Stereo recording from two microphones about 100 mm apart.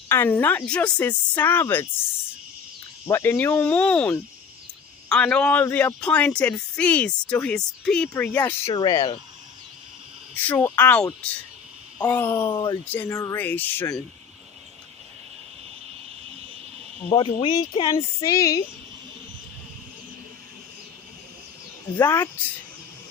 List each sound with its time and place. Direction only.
0.1 s a woman's voice: 20° left (ahead or behind)
3.1 s speech: 20° left (ahead or behind)
8.1 s a woman's voice: 20° left (ahead or behind)
8.7 s speech: 45° left (ahead or behind)
10.3 s a woman's voice: 15° left (ahead or behind)
12.5 s speech: 50° left (ahead or behind)
12.8 s speech: 15° left (ahead or behind)
13.1 s a woman's voice: 30° left (ahead or behind)
13.4 s speech: 15° left (ahead or behind)
17.1 s speech: 55° left (ahead or behind)
17.8 s speech: 30° left (ahead or behind)
21.9 s a woman's voice: 25° left (ahead or behind)